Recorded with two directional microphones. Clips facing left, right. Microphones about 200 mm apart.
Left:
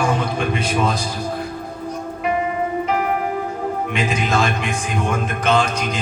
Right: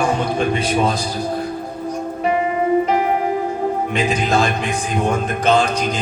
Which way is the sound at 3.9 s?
35° right (ahead or behind).